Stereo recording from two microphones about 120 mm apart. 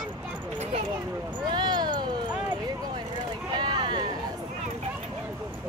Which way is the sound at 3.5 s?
35° right (ahead or behind).